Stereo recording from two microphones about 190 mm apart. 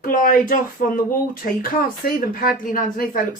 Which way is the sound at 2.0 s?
50° left (ahead or behind).